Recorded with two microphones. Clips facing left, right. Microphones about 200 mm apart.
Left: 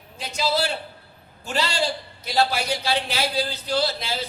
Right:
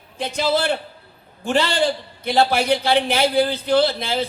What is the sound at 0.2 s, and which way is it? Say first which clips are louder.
A man's voice: right 4 dB; 55° right (ahead or behind).